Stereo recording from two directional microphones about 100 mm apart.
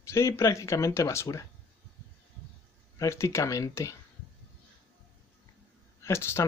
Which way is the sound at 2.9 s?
30° left (ahead or behind).